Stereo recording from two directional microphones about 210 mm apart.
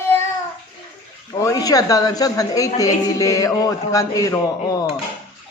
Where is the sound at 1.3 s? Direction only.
15° left (ahead or behind).